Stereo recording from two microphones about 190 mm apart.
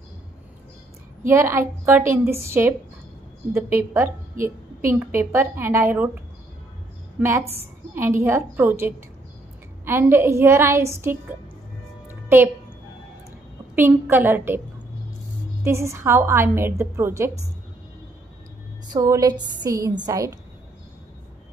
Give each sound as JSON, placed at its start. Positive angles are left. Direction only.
{"t": 1.2, "sound": "a woman's voice", "side_deg": -15}
{"t": 7.2, "sound": "a woman's voice", "side_deg": -15}
{"t": 13.7, "sound": "a woman's voice", "side_deg": -10}
{"t": 15.6, "sound": "a woman's voice", "side_deg": -15}
{"t": 18.9, "sound": "a woman's voice", "side_deg": -20}